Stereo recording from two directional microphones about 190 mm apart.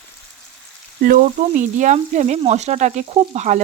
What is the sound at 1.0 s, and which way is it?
Speech, 45° right (ahead or behind).